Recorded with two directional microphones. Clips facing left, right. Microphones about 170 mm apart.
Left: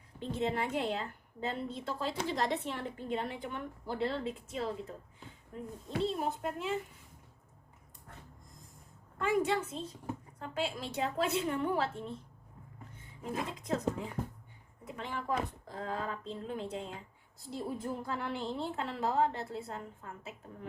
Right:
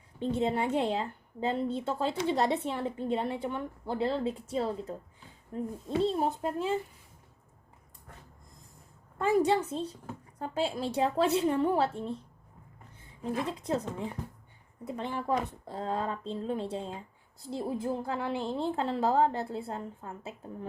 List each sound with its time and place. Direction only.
0.2 s a woman's voice: 30° right (ahead or behind)
9.1 s a woman's voice: 40° right (ahead or behind)
13.2 s a woman's voice: 35° right (ahead or behind)
14.8 s a woman's voice: 35° right (ahead or behind)